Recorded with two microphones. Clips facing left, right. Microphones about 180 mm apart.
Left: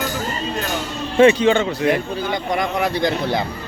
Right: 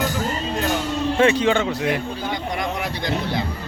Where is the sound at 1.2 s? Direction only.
Centre (ahead or behind).